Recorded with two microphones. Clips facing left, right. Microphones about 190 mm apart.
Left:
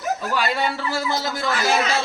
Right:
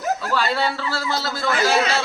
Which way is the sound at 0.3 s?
15° left (ahead or behind).